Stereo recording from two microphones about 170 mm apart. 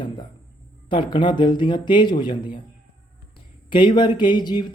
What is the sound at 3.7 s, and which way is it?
Speech, 30° left (ahead or behind).